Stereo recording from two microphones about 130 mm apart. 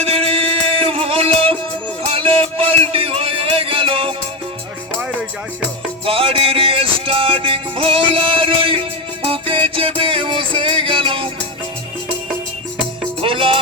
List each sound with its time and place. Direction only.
0.0 s music: 50° right (ahead or behind)
6.1 s music: 45° right (ahead or behind)
13.2 s music: 45° right (ahead or behind)